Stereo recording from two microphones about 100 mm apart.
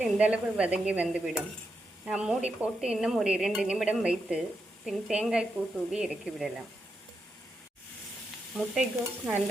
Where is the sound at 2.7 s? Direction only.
5° right (ahead or behind).